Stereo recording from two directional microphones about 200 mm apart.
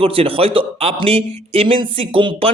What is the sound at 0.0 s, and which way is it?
Speech, 30° right (ahead or behind).